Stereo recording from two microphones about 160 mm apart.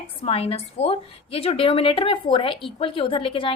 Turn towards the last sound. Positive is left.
turn(degrees=35)  # may be behind; listen again after turning